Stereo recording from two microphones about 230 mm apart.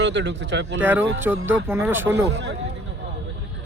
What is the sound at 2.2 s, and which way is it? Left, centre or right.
Speech, right.